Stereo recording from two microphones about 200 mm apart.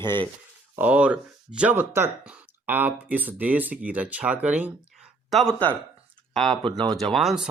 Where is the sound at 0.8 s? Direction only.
5° right (ahead or behind).